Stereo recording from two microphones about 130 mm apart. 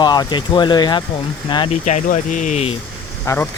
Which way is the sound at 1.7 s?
65° left (ahead or behind).